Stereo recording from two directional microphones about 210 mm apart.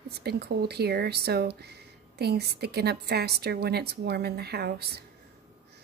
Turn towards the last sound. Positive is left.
turn(degrees=-50)  # may be behind; listen again after turning